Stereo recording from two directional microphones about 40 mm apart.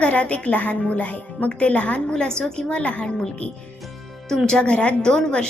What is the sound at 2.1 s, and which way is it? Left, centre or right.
A woman's voice, left.